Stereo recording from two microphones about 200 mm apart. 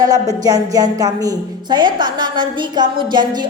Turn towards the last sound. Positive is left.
turn(degrees=-20)  # may be behind; listen again after turning